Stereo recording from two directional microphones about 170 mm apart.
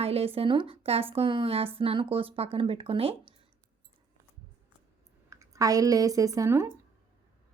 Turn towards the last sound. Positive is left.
turn(degrees=-15)  # may be behind; listen again after turning